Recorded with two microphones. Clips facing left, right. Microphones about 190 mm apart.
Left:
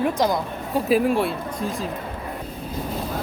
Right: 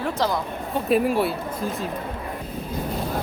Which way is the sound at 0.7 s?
Centre (ahead or behind).